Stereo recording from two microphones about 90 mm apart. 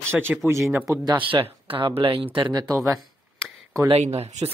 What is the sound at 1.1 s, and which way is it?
Speech, 65° right (ahead or behind).